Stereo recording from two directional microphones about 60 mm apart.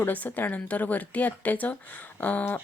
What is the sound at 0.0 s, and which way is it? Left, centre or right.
Speech, left.